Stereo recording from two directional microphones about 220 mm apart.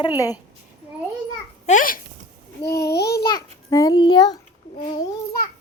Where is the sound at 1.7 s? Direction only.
40° left (ahead or behind).